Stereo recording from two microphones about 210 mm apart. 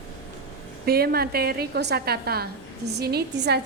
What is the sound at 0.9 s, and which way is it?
A woman's voice, 45° right (ahead or behind).